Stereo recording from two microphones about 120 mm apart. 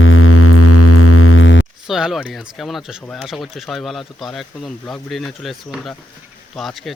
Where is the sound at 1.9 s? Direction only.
5° right (ahead or behind).